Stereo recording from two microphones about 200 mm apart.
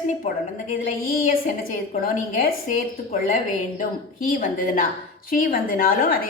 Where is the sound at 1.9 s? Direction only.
45° left (ahead or behind).